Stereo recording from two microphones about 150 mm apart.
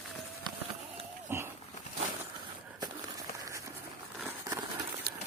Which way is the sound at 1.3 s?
15° right (ahead or behind).